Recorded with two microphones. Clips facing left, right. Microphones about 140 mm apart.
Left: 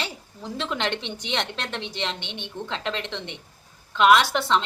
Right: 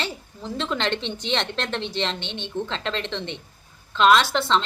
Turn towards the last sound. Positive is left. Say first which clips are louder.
# even
turn(degrees=15)  # may be behind; listen again after turning